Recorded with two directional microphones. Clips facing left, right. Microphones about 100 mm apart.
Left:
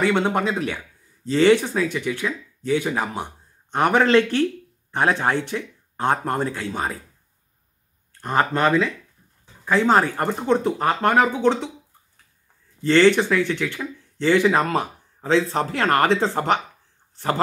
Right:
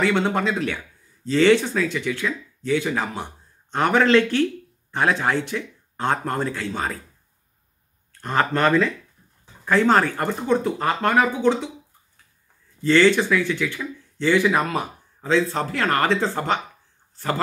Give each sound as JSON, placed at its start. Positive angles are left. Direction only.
{"t": 0.0, "sound": "speech", "side_deg": 15}
{"t": 4.9, "sound": "speech", "side_deg": 35}
{"t": 5.5, "sound": "speech", "side_deg": 20}
{"t": 8.2, "sound": "speech", "side_deg": 20}
{"t": 8.5, "sound": "speech", "side_deg": 10}
{"t": 10.1, "sound": "speech", "side_deg": 25}
{"t": 12.8, "sound": "speech", "side_deg": 25}